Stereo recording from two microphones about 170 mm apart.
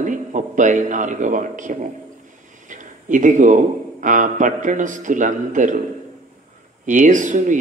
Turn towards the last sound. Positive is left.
turn(degrees=-50)  # may be behind; listen again after turning